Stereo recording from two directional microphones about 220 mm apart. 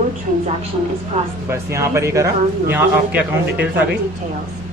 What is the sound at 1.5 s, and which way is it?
A man's voice, 15° right (ahead or behind).